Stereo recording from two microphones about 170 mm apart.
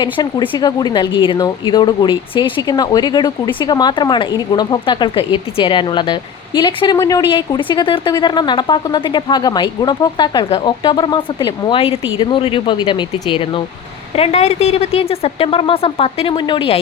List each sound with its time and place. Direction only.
0.0 s a woman's voice: 25° left (ahead or behind)